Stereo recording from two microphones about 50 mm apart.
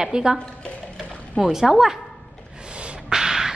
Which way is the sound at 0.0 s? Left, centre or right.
Centre.